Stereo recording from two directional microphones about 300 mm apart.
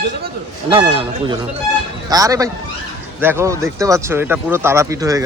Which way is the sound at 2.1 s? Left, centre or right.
Centre.